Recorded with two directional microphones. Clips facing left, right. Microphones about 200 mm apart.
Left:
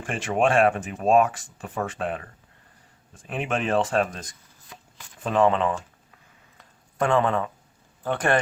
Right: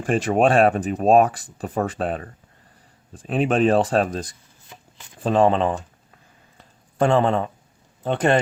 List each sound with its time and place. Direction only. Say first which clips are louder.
0.0 s speech: right 5 dB; 35° right (ahead or behind)
6.6 s a sound: right 5 dB; 30° right (ahead or behind)
8.0 s speech: right 4 dB; 25° right (ahead or behind)